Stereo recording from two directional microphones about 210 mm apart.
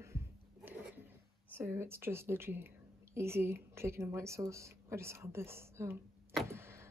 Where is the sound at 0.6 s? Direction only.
10° right (ahead or behind).